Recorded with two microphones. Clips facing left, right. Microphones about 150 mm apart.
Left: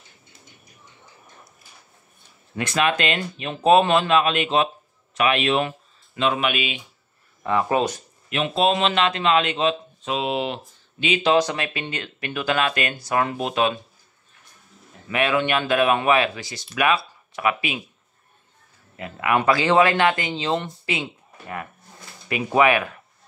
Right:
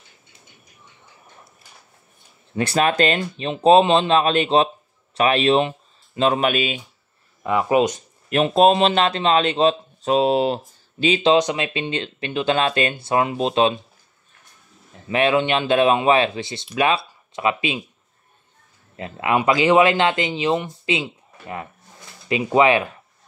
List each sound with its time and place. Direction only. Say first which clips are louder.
2.5 s speech: right 3 dB; 35° right (ahead or behind)
4.1 s speech: right 3 dB; 35° right (ahead or behind)
7.4 s speech: right 3 dB; 15° right (ahead or behind)
8.3 s speech: right 6 dB; 45° right (ahead or behind)
11.3 s speech: right 2 dB; 20° right (ahead or behind)
15.0 s speech: right 3 dB; 25° right (ahead or behind)
18.9 s speech: right 1 dB; 25° right (ahead or behind)
22.3 s speech: right 2 dB; 25° right (ahead or behind)